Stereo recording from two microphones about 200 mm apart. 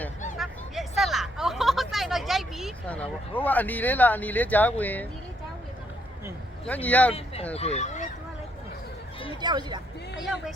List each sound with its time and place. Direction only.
0.3 s a sound: centre (ahead or behind)
6.7 s speech: 5° left (ahead or behind)
7.5 s speech: 30° left (ahead or behind)
9.4 s speech: 20° right (ahead or behind)